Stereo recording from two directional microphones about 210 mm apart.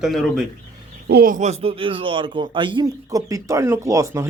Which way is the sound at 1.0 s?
45° right (ahead or behind).